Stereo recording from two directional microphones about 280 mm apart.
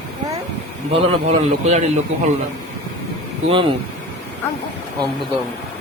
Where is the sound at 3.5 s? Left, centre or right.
Centre.